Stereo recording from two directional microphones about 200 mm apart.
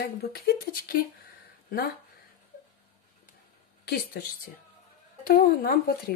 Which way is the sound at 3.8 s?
50° left (ahead or behind).